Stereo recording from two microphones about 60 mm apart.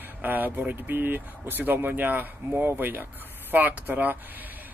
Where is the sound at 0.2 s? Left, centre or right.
Right.